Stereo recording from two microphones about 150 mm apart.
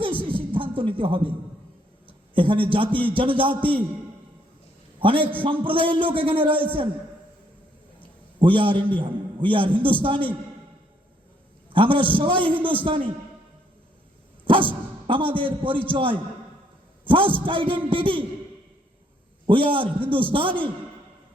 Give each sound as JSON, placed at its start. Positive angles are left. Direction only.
{"t": 0.0, "sound": "a sound", "side_deg": -35}
{"t": 0.8, "sound": "a man's voice", "side_deg": -35}
{"t": 4.9, "sound": "a man's voice", "side_deg": -35}
{"t": 8.4, "sound": "a man's voice", "side_deg": -35}
{"t": 11.7, "sound": "a man's voice", "side_deg": -35}
{"t": 14.4, "sound": "dog", "side_deg": -35}
{"t": 15.0, "sound": "a man's voice", "side_deg": -35}
{"t": 19.5, "sound": "a man's voice", "side_deg": -35}